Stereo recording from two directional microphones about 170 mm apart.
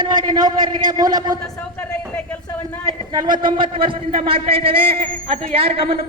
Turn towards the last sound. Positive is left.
turn(degrees=-35)  # may be behind; listen again after turning